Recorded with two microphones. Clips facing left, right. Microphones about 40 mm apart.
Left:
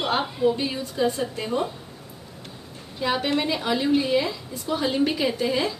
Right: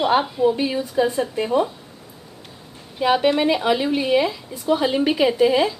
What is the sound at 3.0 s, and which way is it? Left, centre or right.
A woman's voice, centre.